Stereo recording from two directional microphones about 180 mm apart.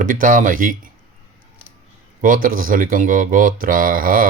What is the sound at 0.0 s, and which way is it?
Speech, 50° right (ahead or behind).